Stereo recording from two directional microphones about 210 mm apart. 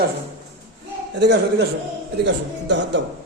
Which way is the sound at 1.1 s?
55° right (ahead or behind).